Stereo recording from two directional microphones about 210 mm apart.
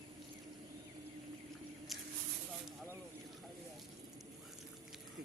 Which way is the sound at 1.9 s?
Centre (ahead or behind).